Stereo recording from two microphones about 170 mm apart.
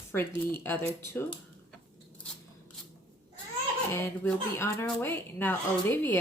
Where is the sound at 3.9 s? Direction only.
15° left (ahead or behind).